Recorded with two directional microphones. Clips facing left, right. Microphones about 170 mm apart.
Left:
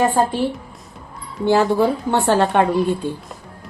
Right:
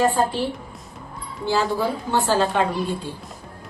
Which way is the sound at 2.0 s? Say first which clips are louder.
Left 4 dB; 65° left (ahead or behind).